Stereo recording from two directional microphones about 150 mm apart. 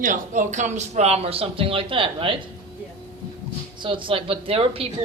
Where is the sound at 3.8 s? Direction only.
35° right (ahead or behind).